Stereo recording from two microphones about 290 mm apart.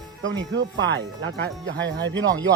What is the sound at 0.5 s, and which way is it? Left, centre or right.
Speech, right.